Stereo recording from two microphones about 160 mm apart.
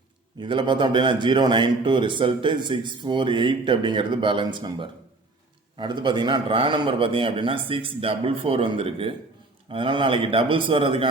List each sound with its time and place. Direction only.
0.3 s a man's voice: 30° right (ahead or behind)